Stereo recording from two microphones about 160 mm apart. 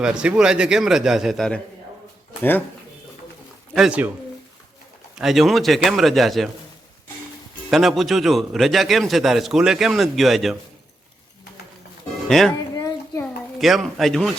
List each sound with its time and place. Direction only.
0.0 s a man's voice: 5° right (ahead or behind)
3.8 s speech: 5° right (ahead or behind)
5.2 s a man's voice: centre (ahead or behind)
7.7 s a man's voice: centre (ahead or behind)
12.3 s a man's voice: centre (ahead or behind)
12.7 s a sound: 25° left (ahead or behind)
13.6 s a man's voice: centre (ahead or behind)